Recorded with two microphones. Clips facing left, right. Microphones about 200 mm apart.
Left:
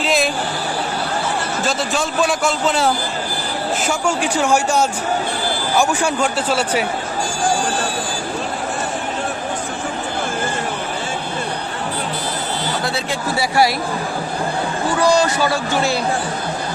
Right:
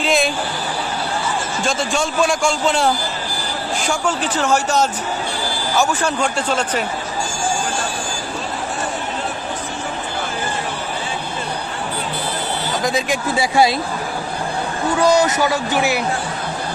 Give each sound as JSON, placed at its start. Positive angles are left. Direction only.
{"t": 0.0, "sound": "a sound", "side_deg": 0}
{"t": 1.6, "sound": "a man's voice", "side_deg": 0}
{"t": 12.8, "sound": "speech", "side_deg": -15}
{"t": 15.0, "sound": "speech", "side_deg": -20}